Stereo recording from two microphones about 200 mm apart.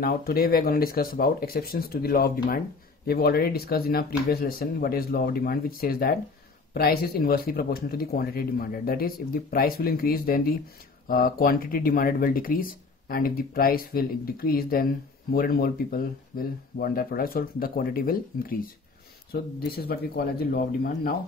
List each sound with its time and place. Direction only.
0.0 s speech: 50° left (ahead or behind)
19.7 s speech: 50° left (ahead or behind)